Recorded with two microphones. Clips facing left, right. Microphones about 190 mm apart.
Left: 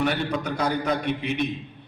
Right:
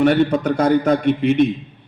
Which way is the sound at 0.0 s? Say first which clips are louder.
Right 10 dB; 50° right (ahead or behind).